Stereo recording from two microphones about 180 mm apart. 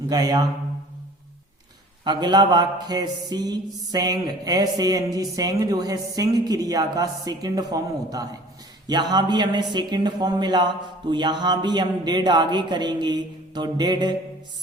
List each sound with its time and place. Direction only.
0.1 s music: 20° right (ahead or behind)
2.0 s music: 25° right (ahead or behind)